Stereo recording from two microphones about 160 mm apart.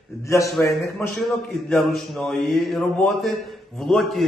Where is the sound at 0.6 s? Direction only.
10° left (ahead or behind).